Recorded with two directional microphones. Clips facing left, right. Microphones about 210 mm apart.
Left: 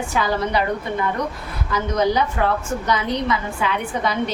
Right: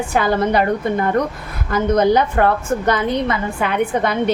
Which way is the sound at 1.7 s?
55° right (ahead or behind).